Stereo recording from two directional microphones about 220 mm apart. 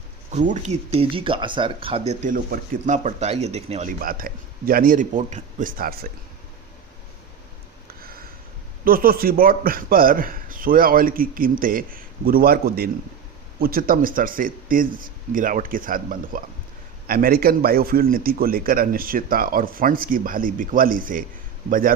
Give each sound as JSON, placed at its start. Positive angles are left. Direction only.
{"t": 0.3, "sound": "speech", "side_deg": -35}
{"t": 4.0, "sound": "a man's voice", "side_deg": -40}
{"t": 8.8, "sound": "a man's voice", "side_deg": -40}